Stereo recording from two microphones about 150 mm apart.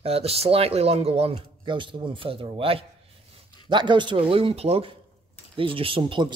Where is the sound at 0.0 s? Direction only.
40° right (ahead or behind).